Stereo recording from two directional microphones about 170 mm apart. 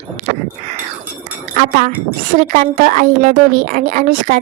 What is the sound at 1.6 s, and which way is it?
A woman's voice, 45° right (ahead or behind).